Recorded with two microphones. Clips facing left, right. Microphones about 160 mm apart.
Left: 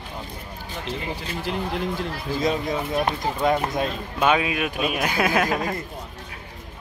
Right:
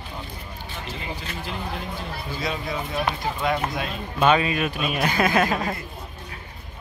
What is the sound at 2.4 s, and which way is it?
Speech, 45° left (ahead or behind).